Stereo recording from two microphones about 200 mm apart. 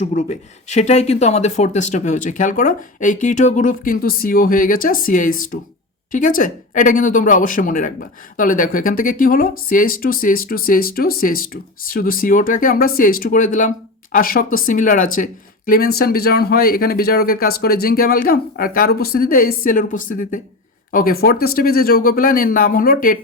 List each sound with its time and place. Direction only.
0.0 s speech: 35° left (ahead or behind)